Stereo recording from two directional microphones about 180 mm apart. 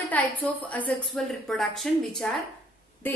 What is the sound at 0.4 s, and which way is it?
A woman's voice, 10° left (ahead or behind).